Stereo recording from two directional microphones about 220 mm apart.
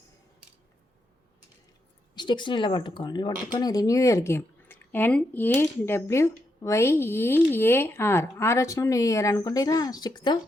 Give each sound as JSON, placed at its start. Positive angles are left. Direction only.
{"t": 2.1, "sound": "speech", "side_deg": 20}